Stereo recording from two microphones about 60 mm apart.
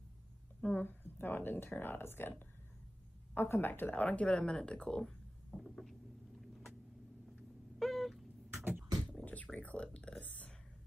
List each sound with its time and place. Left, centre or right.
0.6 s speech: left
3.9 s speech: left
5.0 s a sound: centre
7.8 s cat: centre
9.2 s music: left
9.6 s a sound: left
10.2 s whispering: left